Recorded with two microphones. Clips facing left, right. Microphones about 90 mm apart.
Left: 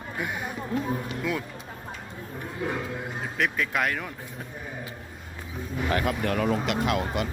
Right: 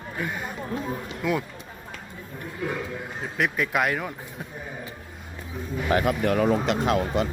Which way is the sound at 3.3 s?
10° right (ahead or behind).